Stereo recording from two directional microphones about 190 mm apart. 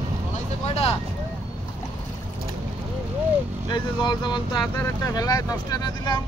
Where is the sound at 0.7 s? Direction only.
30° left (ahead or behind).